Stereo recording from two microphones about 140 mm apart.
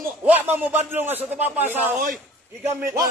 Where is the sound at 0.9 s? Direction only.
15° right (ahead or behind).